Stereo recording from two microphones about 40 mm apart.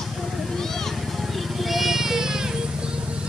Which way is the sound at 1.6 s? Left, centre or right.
Centre.